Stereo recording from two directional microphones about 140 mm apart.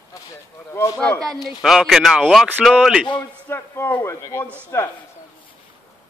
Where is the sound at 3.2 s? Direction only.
15° left (ahead or behind).